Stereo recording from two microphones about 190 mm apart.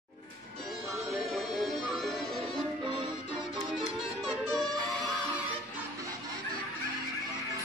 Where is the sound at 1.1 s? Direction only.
Centre (ahead or behind).